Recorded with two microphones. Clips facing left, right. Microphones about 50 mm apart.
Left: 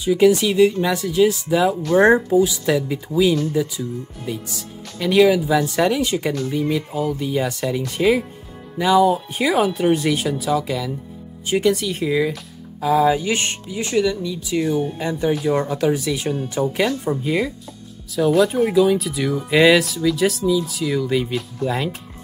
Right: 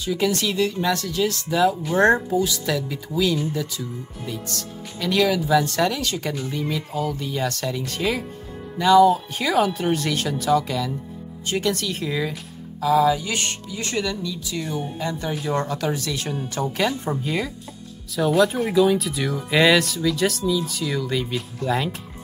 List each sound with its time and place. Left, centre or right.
0.0 s speech: centre
6.5 s speech: centre
12.8 s speech: left
14.6 s speech: centre
15.0 s speech: centre